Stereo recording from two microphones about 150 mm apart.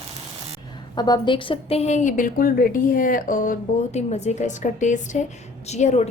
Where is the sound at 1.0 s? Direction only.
30° left (ahead or behind).